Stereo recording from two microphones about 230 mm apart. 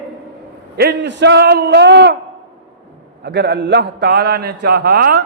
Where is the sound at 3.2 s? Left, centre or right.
Right.